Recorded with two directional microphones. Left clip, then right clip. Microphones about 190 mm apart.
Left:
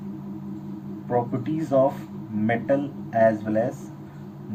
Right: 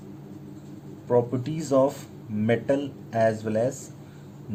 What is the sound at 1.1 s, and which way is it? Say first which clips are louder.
Speech: right 2 dB; 90° right.